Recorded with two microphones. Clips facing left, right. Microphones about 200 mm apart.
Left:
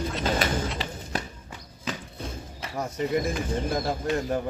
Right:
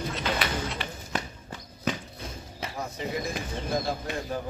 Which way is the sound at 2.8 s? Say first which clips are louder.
Left 7 dB; 50° left (ahead or behind).